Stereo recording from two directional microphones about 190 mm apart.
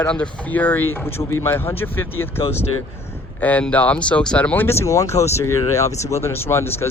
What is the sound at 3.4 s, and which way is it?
Speech, 10° left (ahead or behind).